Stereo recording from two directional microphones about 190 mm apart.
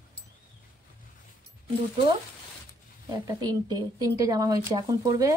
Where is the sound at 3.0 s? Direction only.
20° right (ahead or behind).